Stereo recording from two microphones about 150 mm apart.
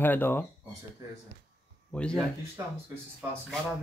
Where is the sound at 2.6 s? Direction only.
20° right (ahead or behind).